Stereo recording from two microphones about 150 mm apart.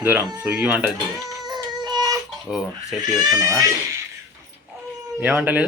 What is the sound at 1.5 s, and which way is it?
Baby cry, 25° right (ahead or behind).